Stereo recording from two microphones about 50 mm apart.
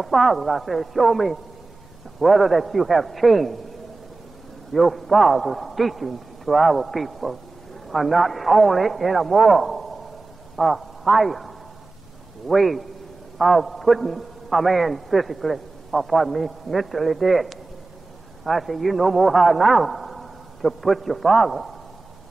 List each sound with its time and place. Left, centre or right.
0.0 s a man's voice: centre
4.7 s a man's voice: centre